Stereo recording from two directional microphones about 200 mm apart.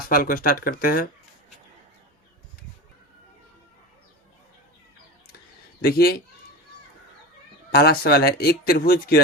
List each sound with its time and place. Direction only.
0.1 s speech: 45° left (ahead or behind)
5.8 s speech: 50° left (ahead or behind)
7.7 s speech: 50° left (ahead or behind)